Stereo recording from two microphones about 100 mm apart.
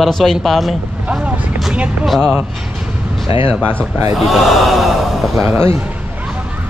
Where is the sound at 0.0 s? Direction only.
5° left (ahead or behind).